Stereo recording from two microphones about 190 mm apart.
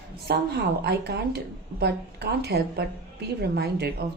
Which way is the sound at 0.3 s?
55° right (ahead or behind).